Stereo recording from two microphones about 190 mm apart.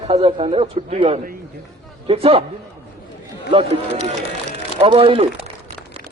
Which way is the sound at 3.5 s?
30° right (ahead or behind).